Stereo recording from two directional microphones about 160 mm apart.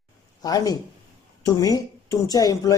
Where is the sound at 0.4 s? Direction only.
25° left (ahead or behind).